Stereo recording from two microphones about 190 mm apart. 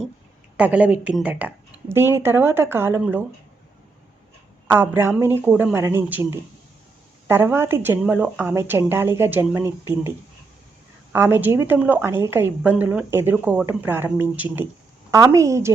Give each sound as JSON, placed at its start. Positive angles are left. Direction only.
{"t": 0.5, "sound": "a woman's voice", "side_deg": -5}
{"t": 4.7, "sound": "a woman's voice", "side_deg": -10}
{"t": 7.3, "sound": "a woman's voice", "side_deg": -10}
{"t": 11.1, "sound": "a woman's voice", "side_deg": -10}